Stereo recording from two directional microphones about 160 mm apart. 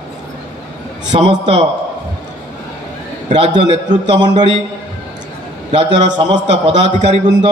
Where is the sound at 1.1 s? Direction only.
40° right (ahead or behind).